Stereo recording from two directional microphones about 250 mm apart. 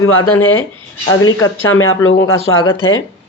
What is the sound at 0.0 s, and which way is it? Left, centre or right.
A woman's voice, left.